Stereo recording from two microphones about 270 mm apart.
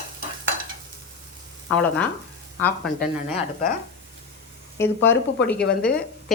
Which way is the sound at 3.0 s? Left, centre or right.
Left.